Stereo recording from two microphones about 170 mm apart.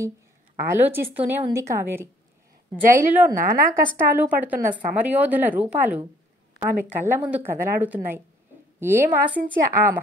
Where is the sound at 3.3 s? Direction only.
55° right (ahead or behind).